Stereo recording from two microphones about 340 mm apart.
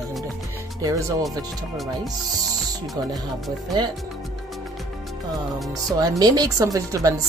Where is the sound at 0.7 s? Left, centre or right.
Centre.